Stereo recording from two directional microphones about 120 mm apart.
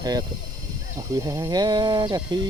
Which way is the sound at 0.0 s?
35° right (ahead or behind).